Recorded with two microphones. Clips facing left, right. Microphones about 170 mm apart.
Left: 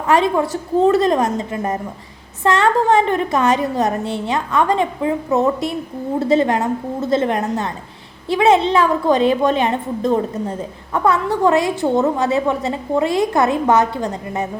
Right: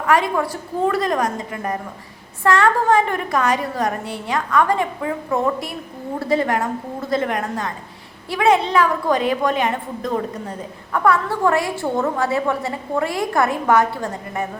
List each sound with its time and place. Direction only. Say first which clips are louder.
0.1 s a woman's voice: left 3 dB; 25° left (ahead or behind)